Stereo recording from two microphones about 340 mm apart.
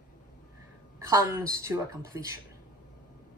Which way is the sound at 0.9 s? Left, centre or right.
Centre.